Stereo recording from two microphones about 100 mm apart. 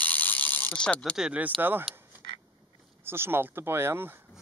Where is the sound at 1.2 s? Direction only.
15° right (ahead or behind).